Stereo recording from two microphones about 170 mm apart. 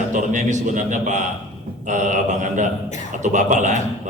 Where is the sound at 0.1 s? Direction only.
50° right (ahead or behind).